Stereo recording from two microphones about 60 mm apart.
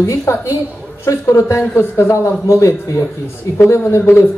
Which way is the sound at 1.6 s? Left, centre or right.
Left.